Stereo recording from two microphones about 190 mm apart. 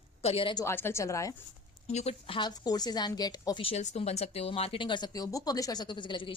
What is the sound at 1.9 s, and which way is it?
A woman's voice, 35° left (ahead or behind).